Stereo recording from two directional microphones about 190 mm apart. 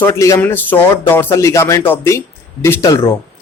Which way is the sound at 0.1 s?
15° left (ahead or behind).